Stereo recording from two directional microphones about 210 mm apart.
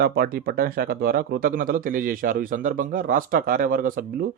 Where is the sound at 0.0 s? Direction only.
45° right (ahead or behind).